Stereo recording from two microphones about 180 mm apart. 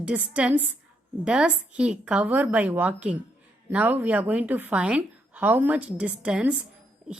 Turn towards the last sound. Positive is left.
turn(degrees=-5)  # may be behind; listen again after turning